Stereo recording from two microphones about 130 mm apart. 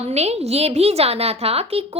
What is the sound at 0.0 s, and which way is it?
A woman's voice, 55° right (ahead or behind).